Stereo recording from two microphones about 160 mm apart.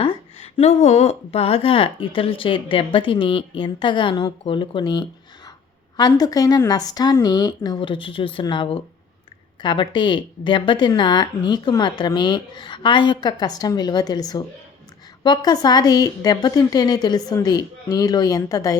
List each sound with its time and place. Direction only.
0.0 s a woman's voice: 40° left (ahead or behind); by 18.8 s 20° left (ahead or behind)